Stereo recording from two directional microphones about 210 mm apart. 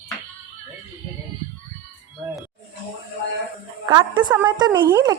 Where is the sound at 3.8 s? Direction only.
20° right (ahead or behind).